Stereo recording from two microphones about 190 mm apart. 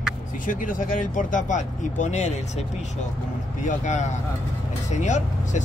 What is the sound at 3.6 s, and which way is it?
Speech, 35° left (ahead or behind).